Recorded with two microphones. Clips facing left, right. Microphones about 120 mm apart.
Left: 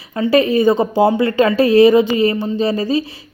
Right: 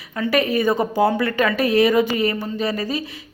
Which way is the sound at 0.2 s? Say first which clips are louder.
Left 6 dB; 30° left (ahead or behind).